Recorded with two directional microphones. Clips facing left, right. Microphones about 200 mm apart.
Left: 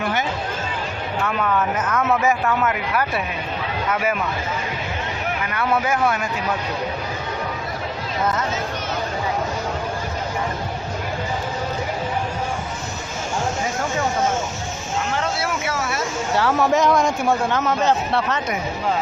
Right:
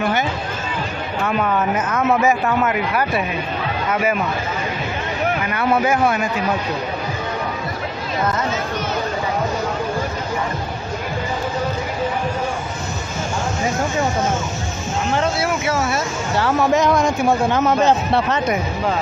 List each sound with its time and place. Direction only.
1.4 s speech: 20° right (ahead or behind)
1.7 s a man's voice: 10° right (ahead or behind)
5.8 s a man's voice: 10° right (ahead or behind)
15.4 s speech: 20° right (ahead or behind)
16.3 s speech: 5° left (ahead or behind)
17.5 s a man's voice: 15° right (ahead or behind)